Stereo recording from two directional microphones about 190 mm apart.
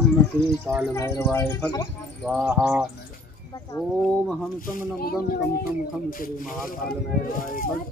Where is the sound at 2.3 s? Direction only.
Centre (ahead or behind).